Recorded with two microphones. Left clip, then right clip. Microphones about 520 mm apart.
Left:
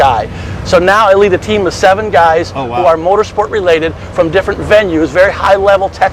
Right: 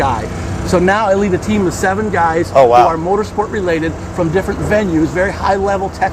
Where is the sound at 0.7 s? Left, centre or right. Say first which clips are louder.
Left 6 dB; left.